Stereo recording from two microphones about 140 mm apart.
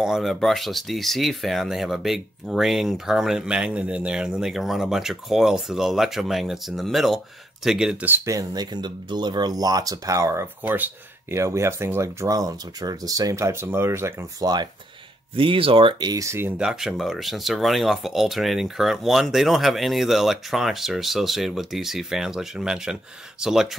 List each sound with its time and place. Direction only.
0.0 s speech: centre (ahead or behind)
8.3 s speech: 25° right (ahead or behind)
15.3 s speech: 40° right (ahead or behind); by 23.7 s 5° right (ahead or behind)